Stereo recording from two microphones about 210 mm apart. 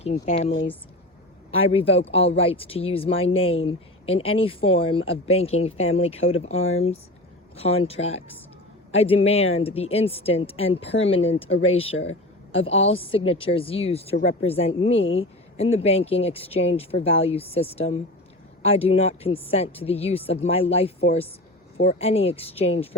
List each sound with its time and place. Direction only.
0.0 s speech: 30° left (ahead or behind)
1.6 s speech: 25° left (ahead or behind)
11.5 s speech: 70° left (ahead or behind)
12.6 s speech: 30° left (ahead or behind)